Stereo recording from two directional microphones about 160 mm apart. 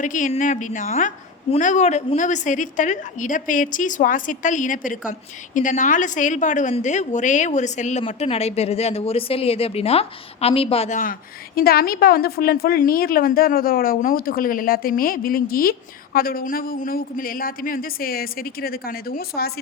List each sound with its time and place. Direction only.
0.0 s a woman's voice: 55° left (ahead or behind); by 19.5 s 75° left (ahead or behind)